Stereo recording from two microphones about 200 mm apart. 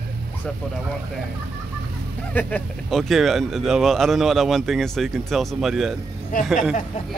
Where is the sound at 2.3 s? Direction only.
5° left (ahead or behind).